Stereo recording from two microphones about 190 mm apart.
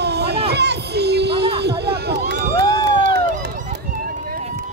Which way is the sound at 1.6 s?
60° right (ahead or behind).